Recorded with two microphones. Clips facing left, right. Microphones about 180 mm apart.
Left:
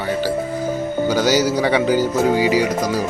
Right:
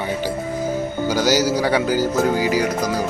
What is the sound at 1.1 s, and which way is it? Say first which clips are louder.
Speech: even; 5° right (ahead or behind).